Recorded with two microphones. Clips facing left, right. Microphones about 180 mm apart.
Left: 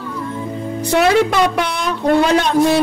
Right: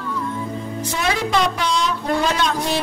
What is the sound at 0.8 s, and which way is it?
Speech, 65° left (ahead or behind).